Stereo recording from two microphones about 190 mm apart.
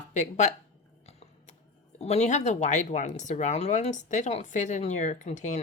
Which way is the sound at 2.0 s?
35° left (ahead or behind).